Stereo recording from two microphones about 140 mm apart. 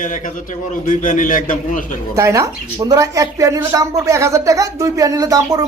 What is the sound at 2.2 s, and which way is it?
A woman's voice, 20° right (ahead or behind).